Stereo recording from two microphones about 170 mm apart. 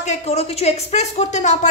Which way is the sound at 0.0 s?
40° left (ahead or behind).